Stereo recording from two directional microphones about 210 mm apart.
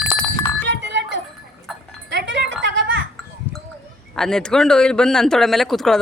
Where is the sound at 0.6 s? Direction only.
55° right (ahead or behind).